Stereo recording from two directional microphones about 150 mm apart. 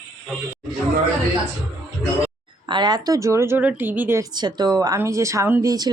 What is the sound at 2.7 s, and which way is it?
Speech, 30° right (ahead or behind).